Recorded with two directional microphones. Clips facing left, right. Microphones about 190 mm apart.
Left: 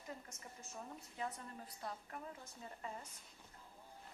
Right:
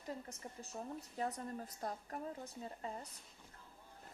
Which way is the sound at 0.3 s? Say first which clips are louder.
Right 5 dB; 35° right (ahead or behind).